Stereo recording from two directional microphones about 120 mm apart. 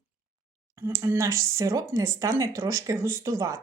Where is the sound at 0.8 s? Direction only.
25° right (ahead or behind).